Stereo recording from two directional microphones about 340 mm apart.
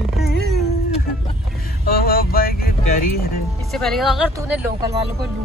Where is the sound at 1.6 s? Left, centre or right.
Left.